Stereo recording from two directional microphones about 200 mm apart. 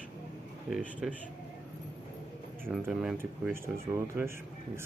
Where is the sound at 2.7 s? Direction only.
5° right (ahead or behind).